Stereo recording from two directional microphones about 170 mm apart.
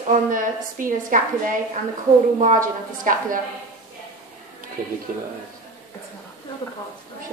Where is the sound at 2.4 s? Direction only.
50° right (ahead or behind).